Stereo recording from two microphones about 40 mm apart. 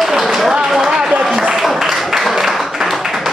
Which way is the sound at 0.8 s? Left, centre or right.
Centre.